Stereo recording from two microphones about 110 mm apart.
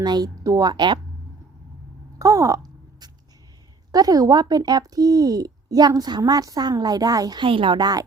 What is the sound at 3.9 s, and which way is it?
A woman's voice, 35° right (ahead or behind).